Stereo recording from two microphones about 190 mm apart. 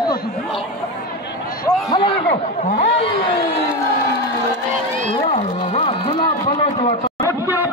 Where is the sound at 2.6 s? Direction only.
40° left (ahead or behind).